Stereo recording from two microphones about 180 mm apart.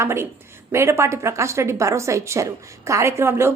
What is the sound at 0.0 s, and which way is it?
A woman's voice, 15° right (ahead or behind).